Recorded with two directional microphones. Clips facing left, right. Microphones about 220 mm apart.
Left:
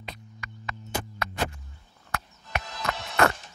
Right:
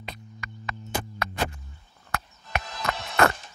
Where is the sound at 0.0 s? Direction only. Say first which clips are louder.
Right 2 dB; 50° right (ahead or behind).